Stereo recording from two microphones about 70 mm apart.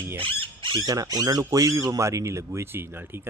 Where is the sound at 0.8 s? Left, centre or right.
Right.